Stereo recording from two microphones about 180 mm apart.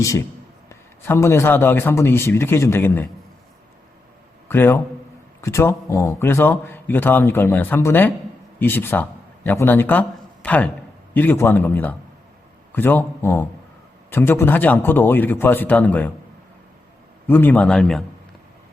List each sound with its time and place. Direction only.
0.7 s speech: 15° left (ahead or behind)
4.4 s a man's voice: 10° left (ahead or behind)
17.2 s speech: 10° left (ahead or behind)